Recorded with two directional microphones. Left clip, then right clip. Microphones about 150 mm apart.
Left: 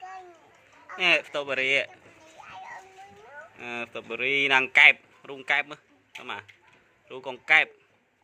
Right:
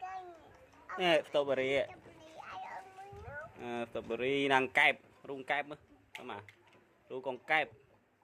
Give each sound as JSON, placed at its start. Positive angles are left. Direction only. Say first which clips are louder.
{"t": 0.9, "sound": "speech", "louder": "left 6 dB", "side_deg": -25}
{"t": 3.6, "sound": "a man's voice", "louder": "left 6 dB", "side_deg": -15}
{"t": 7.1, "sound": "a man's voice", "louder": "left 11 dB", "side_deg": -10}